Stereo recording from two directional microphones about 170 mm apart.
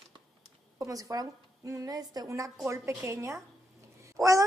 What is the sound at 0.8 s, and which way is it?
A woman's voice, 20° right (ahead or behind).